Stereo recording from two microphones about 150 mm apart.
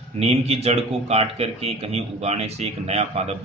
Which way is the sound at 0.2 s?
45° right (ahead or behind).